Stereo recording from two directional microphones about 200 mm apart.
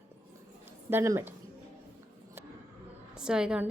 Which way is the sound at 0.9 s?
15° right (ahead or behind).